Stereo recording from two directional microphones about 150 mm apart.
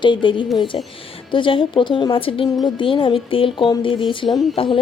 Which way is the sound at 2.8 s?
35° left (ahead or behind).